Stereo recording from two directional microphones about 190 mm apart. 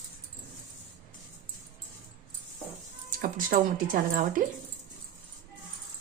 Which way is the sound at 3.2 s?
45° right (ahead or behind).